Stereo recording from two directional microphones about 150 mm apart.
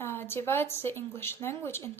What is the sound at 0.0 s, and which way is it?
A woman's voice, 15° left (ahead or behind).